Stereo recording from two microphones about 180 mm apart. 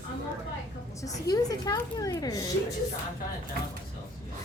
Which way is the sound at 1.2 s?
20° left (ahead or behind).